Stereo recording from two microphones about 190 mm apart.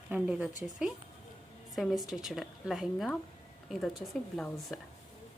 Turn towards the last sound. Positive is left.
turn(degrees=0)  # may be behind; listen again after turning